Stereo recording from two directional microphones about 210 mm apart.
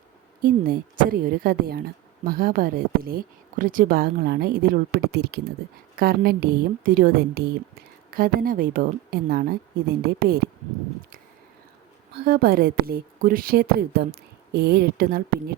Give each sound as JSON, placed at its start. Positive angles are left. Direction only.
{"t": 0.4, "sound": "a woman's voice", "side_deg": -45}
{"t": 12.1, "sound": "a woman's voice", "side_deg": -45}